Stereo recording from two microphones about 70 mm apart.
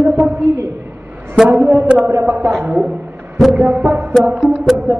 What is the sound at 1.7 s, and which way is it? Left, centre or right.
Speech, right.